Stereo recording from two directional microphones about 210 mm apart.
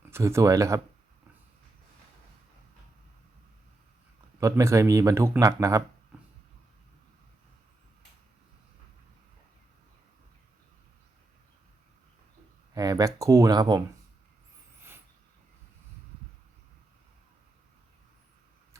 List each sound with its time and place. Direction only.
0.1 s speech: 15° right (ahead or behind)
4.4 s speech: 15° right (ahead or behind)
12.7 s speech: 15° right (ahead or behind)